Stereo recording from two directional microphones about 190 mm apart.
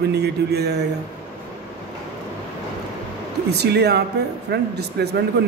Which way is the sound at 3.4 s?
60° right (ahead or behind).